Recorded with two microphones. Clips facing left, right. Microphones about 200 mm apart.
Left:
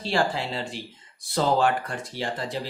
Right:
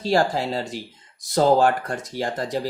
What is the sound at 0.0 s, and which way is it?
Speech, 40° right (ahead or behind).